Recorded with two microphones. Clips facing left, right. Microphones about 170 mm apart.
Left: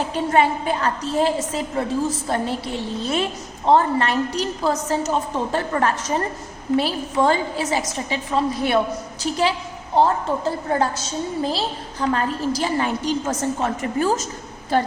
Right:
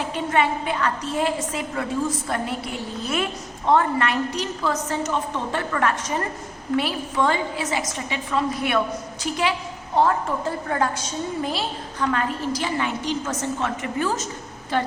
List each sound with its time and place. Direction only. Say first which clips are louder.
0.1 s a woman's voice: left 3 dB; 35° left (ahead or behind)